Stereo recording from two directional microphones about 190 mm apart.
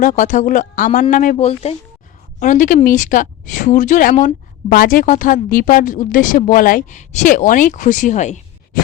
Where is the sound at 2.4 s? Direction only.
45° left (ahead or behind).